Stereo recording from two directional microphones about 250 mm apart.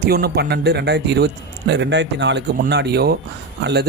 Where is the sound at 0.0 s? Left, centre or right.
Right.